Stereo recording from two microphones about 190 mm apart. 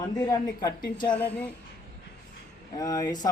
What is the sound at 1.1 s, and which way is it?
Speech, 5° left (ahead or behind).